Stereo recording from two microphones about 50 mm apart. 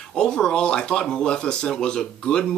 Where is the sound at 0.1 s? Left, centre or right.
Centre.